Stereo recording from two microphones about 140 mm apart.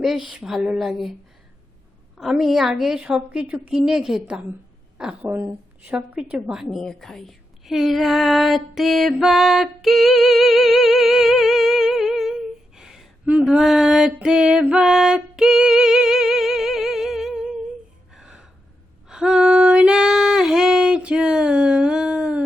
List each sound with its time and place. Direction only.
0.0 s a woman's voice: centre (ahead or behind)
2.1 s a woman's voice: 5° right (ahead or behind)
5.2 s a woman's voice: 15° right (ahead or behind)
18.1 s gasp: 5° right (ahead or behind)
19.0 s female singing: 5° right (ahead or behind)